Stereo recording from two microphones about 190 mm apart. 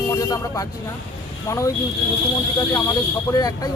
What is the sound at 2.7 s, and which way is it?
Speech, 15° left (ahead or behind).